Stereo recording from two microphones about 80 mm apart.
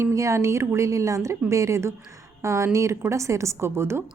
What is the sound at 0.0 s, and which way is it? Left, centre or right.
A woman's voice, right.